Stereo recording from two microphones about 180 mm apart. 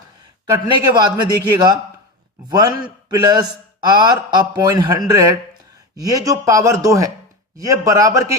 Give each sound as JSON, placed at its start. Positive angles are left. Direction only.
{"t": 0.5, "sound": "a man's voice", "side_deg": -20}